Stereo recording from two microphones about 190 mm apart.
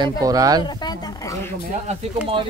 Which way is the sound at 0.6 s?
25° left (ahead or behind).